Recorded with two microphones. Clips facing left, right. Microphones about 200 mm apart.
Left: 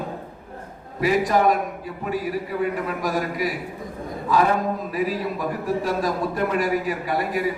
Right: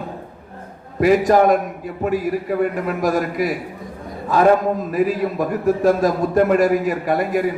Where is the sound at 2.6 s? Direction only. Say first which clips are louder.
Right 5 dB; 50° right (ahead or behind).